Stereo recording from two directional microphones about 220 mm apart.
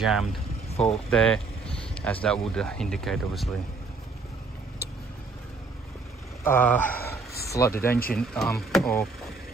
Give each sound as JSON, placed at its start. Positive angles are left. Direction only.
{"t": 0.0, "sound": "speech", "side_deg": 0}
{"t": 6.4, "sound": "a sound", "side_deg": 10}
{"t": 8.1, "sound": "speech", "side_deg": 0}